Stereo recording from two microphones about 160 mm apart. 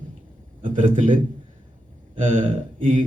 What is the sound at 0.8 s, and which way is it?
Speech, 55° right (ahead or behind).